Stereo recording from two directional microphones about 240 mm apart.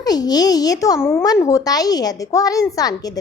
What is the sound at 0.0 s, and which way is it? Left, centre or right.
Speech, centre.